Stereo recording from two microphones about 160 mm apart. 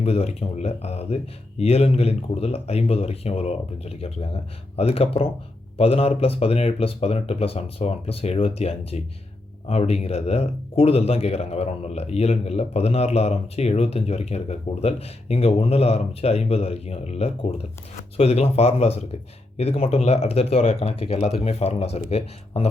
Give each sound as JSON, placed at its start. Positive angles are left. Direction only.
{"t": 0.0, "sound": "speech", "side_deg": 40}